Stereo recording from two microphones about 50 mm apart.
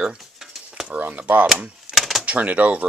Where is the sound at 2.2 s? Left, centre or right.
Right.